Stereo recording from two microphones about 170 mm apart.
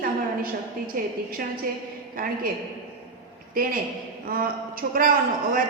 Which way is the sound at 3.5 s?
55° right (ahead or behind).